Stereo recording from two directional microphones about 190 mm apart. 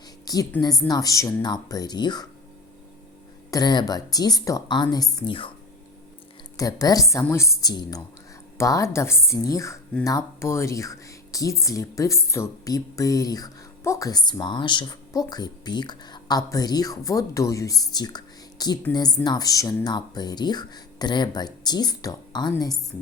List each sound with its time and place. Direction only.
0.3 s a woman's voice: 20° left (ahead or behind)
3.5 s speech: 20° left (ahead or behind)
6.6 s speech: 20° left (ahead or behind)